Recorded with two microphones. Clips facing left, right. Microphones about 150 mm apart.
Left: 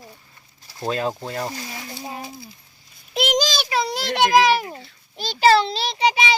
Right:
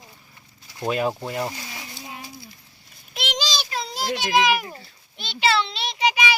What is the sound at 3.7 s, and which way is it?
Child singing, 75° left (ahead or behind).